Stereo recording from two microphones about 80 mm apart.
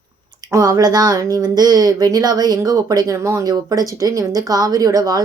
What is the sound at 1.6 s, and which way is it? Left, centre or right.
Speech, right.